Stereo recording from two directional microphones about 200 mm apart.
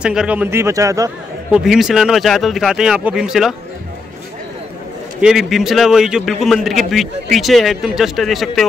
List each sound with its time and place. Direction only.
0.0 s a man's voice: 5° right (ahead or behind)
1.5 s a man's voice: centre (ahead or behind)
5.2 s a man's voice: centre (ahead or behind)